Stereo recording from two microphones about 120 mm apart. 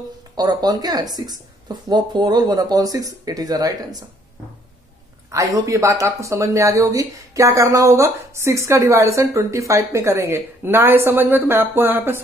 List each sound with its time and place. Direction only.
0.4 s speech: 35° right (ahead or behind)
5.3 s speech: 25° right (ahead or behind)